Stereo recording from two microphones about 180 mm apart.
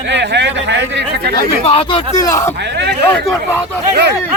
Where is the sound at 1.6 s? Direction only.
30° left (ahead or behind).